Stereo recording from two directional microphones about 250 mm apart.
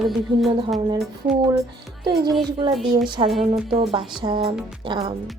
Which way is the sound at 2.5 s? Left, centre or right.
Centre.